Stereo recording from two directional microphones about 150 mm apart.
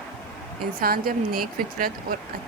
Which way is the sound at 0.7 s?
80° right.